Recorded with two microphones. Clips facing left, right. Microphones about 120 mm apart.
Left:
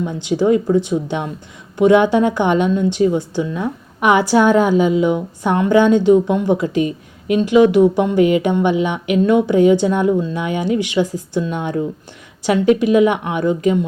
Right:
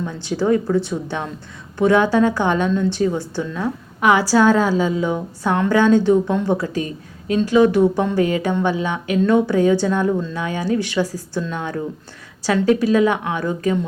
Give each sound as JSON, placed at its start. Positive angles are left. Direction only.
{"t": 0.0, "sound": "a woman's voice", "side_deg": 15}